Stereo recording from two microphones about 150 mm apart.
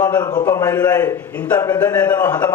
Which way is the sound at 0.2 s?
25° left (ahead or behind).